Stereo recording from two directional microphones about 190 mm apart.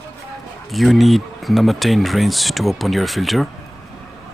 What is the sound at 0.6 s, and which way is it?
Speech, centre (ahead or behind).